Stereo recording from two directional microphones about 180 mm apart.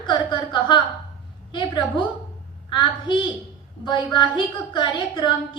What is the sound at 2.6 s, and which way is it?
A woman's voice, 25° left (ahead or behind).